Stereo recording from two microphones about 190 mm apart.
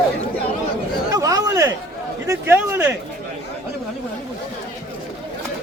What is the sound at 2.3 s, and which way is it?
Speech, 10° right (ahead or behind).